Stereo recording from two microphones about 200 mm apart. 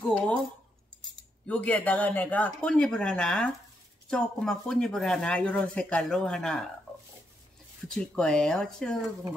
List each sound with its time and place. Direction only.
1.5 s speech: 5° left (ahead or behind)
7.9 s speech: 5° left (ahead or behind)